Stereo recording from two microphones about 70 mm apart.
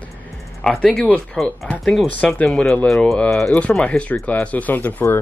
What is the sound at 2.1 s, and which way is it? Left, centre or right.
Speech, centre.